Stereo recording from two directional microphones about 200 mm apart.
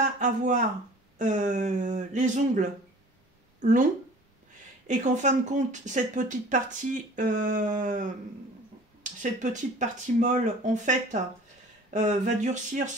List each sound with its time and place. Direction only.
0.0 s a sound: 40° right (ahead or behind)
1.1 s speech: 40° right (ahead or behind)
9.2 s speech: 40° right (ahead or behind)